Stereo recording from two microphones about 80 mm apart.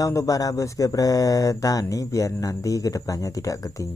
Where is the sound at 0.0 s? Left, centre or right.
Left.